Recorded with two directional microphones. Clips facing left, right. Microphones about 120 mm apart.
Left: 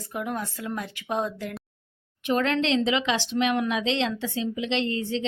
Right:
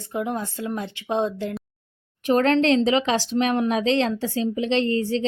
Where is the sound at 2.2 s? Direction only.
40° right (ahead or behind).